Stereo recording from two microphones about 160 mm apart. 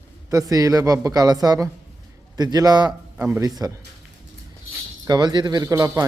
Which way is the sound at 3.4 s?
25° right (ahead or behind).